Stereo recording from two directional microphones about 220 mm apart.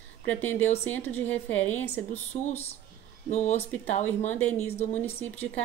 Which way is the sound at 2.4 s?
30° left (ahead or behind).